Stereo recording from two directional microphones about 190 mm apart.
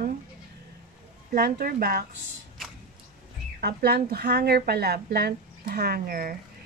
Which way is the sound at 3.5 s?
55° right (ahead or behind).